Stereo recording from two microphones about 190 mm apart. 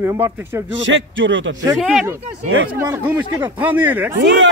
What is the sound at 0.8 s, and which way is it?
Speech, 75° right (ahead or behind).